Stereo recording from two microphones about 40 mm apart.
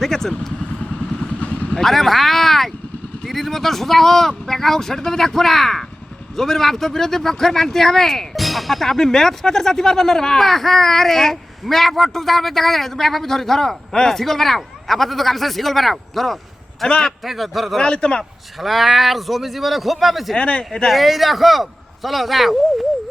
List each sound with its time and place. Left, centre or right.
0.0 s speech: centre
1.4 s vehicle: left
1.7 s a man's voice: centre
17.7 s a man's voice: left
18.2 s a man's voice: centre
20.3 s a man's voice: left
20.8 s a man's voice: centre